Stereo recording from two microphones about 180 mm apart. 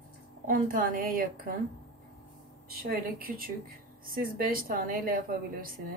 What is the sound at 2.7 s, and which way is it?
A woman's voice, 55° right (ahead or behind).